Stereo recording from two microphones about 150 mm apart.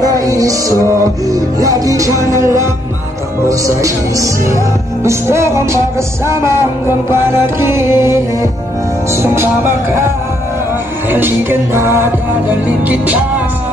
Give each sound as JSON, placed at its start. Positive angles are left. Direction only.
{"t": 0.0, "sound": "music", "side_deg": -25}